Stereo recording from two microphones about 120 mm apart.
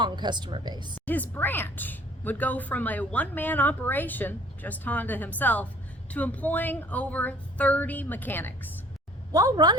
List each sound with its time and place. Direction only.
0.0 s speech: 40° right (ahead or behind)
1.0 s a woman's voice: 15° left (ahead or behind)
9.3 s a woman's voice: 30° right (ahead or behind)